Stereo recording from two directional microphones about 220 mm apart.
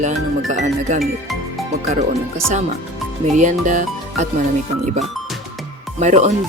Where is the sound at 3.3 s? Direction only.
35° right (ahead or behind).